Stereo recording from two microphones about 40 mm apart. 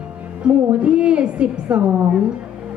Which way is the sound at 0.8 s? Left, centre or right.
Right.